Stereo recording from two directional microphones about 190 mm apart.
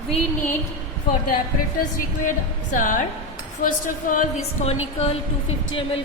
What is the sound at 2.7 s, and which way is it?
A woman's voice, 45° left (ahead or behind).